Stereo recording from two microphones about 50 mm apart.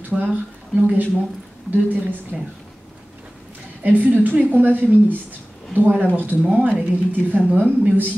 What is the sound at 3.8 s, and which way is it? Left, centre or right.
Speech, right.